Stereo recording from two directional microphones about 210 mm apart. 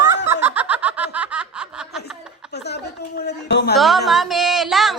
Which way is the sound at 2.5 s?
50° left (ahead or behind).